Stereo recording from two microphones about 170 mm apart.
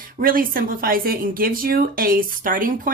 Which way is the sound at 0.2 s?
55° right (ahead or behind).